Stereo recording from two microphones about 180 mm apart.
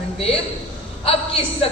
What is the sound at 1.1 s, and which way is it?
Speech, 30° left (ahead or behind).